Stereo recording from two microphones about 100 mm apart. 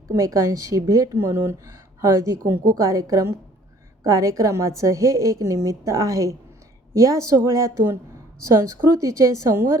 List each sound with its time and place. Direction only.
0.1 s speech: 35° right (ahead or behind)